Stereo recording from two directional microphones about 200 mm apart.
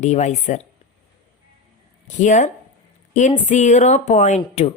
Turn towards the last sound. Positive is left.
turn(degrees=35)  # may be behind; listen again after turning